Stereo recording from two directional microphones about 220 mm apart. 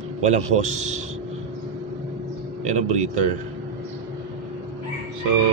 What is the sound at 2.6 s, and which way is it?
Speech, 30° right (ahead or behind).